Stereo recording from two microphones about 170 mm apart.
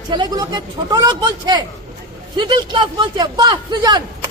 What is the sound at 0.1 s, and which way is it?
A man's voice, 25° right (ahead or behind).